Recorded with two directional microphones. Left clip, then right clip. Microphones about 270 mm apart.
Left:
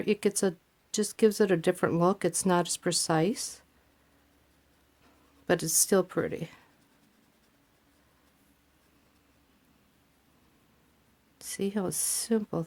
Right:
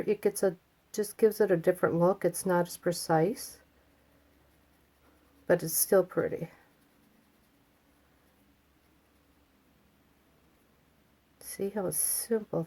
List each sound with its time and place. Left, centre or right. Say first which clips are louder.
0.0 s speech: even; left
5.5 s speech: even; left
11.4 s speech: left 1 dB; left